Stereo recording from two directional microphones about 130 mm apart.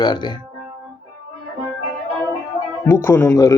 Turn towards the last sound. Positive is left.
turn(degrees=25)  # may be behind; listen again after turning